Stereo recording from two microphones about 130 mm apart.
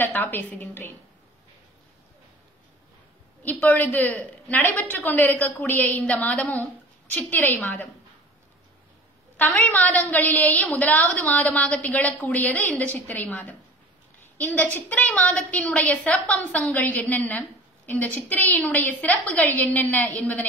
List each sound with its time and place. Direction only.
0.0 s a woman's voice: 15° left (ahead or behind)
3.4 s a woman's voice: 15° left (ahead or behind)
9.4 s a woman's voice: 15° left (ahead or behind)